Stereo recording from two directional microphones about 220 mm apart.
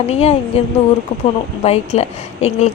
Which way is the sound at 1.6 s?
30° left (ahead or behind).